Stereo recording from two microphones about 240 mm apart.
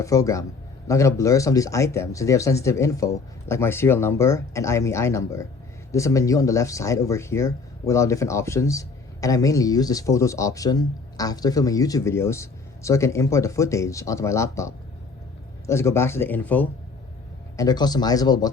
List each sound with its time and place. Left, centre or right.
0.0 s speech: centre